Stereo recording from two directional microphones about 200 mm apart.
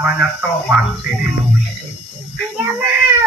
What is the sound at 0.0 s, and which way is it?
Speech, 5° right (ahead or behind).